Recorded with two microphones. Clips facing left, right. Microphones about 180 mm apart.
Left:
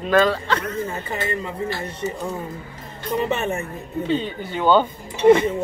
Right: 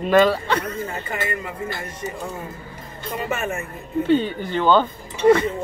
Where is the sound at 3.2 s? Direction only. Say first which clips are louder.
Even; 30° left (ahead or behind).